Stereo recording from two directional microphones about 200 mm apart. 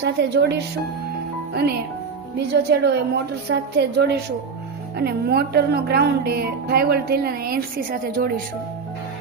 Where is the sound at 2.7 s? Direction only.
60° right (ahead or behind).